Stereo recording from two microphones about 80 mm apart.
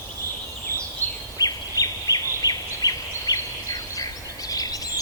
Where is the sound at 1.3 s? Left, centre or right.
Left.